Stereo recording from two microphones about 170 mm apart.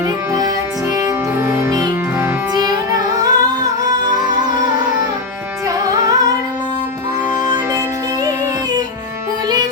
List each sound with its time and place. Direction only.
0.9 s music: 15° right (ahead or behind)
5.8 s music: 20° right (ahead or behind)
7.4 s music: 20° right (ahead or behind)